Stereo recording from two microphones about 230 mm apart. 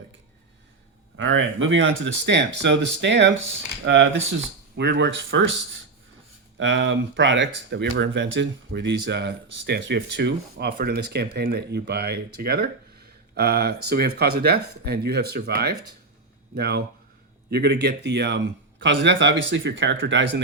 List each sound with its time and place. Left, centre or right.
1.1 s speech: right
6.6 s speech: right